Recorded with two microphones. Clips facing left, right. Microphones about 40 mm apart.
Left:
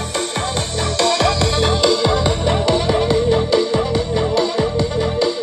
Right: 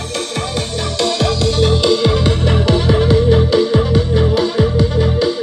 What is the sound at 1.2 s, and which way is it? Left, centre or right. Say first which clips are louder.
Music: even; left.